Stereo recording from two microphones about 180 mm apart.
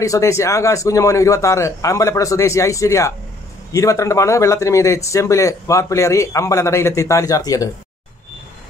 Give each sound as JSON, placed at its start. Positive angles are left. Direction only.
{"t": 0.0, "sound": "speech", "side_deg": 15}